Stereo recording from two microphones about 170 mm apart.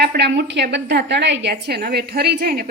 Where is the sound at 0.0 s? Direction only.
75° right (ahead or behind).